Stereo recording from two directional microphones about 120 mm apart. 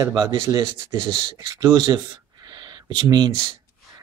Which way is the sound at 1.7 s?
40° right (ahead or behind).